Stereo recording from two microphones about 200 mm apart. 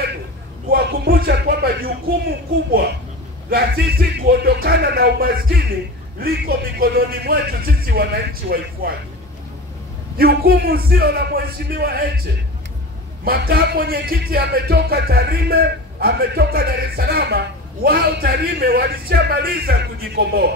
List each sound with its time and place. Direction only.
0.7 s a sound: 50° right (ahead or behind)
3.4 s music: 50° right (ahead or behind)
10.1 s music: 50° right (ahead or behind)
13.2 s music: 50° right (ahead or behind)